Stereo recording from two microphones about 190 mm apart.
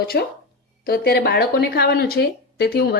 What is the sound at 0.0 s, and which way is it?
A woman's voice, 55° left (ahead or behind).